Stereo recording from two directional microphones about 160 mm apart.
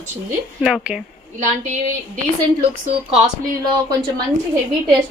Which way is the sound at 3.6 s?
25° right (ahead or behind).